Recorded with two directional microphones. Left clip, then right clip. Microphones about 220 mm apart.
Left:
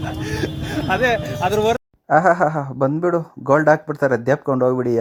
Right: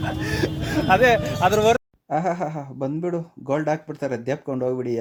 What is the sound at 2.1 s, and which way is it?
Speech, 20° left (ahead or behind).